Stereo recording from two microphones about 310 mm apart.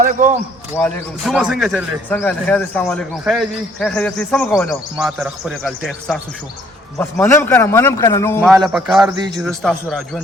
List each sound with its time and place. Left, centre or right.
0.0 s speech: right
0.8 s a man's voice: centre